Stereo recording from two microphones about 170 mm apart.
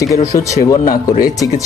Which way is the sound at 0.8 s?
55° left (ahead or behind).